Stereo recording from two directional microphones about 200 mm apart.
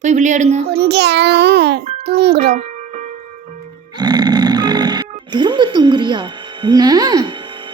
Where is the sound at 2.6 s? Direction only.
40° right (ahead or behind).